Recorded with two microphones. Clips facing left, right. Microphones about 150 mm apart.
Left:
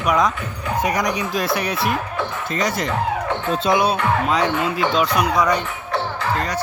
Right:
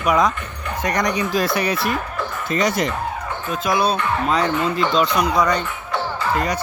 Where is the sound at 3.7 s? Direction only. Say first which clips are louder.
Right 2 dB; 10° left (ahead or behind).